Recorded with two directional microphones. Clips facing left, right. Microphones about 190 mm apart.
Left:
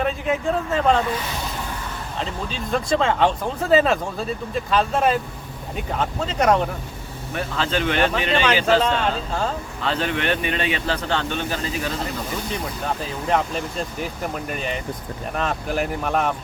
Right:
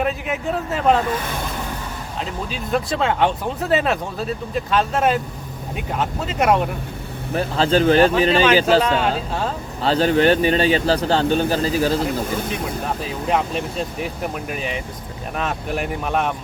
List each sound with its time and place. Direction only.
0.0 s speech: 5° right (ahead or behind)
1.1 s speech: 50° right (ahead or behind)
2.1 s speech: 5° right (ahead or behind)
7.3 s speech: 35° right (ahead or behind)
8.8 s speech: 5° right (ahead or behind)
9.8 s speech: 35° right (ahead or behind)
13.3 s speech: centre (ahead or behind)